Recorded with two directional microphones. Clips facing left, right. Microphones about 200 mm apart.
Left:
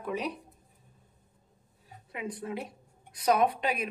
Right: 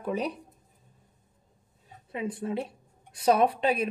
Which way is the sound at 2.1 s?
25° right (ahead or behind).